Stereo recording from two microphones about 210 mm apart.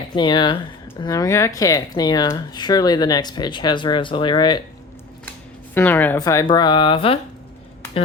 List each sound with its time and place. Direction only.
0.2 s speech: 20° left (ahead or behind)
5.7 s speech: 10° left (ahead or behind); by 7.2 s 25° left (ahead or behind)